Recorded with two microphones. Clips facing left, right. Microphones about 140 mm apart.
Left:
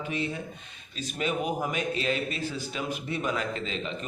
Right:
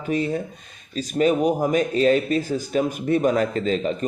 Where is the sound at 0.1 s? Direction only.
40° right (ahead or behind).